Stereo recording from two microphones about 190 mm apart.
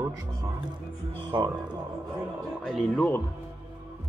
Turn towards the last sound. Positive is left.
turn(degrees=5)  # may be behind; listen again after turning